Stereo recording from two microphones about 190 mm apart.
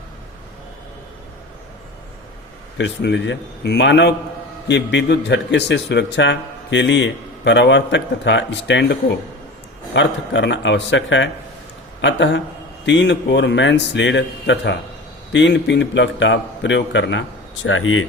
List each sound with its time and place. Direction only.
2.7 s a man's voice: 70° left (ahead or behind); by 18.0 s 90° left